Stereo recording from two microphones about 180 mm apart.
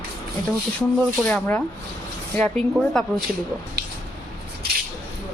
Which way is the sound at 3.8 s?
70° right (ahead or behind).